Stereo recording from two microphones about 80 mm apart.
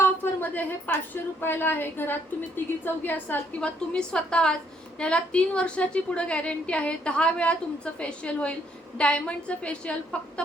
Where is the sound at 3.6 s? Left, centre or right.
Centre.